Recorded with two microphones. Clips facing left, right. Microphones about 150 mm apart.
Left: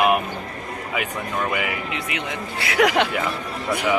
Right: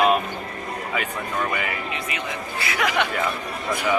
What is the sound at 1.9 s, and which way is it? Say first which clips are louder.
Speech: left 1 dB; 75° left (ahead or behind).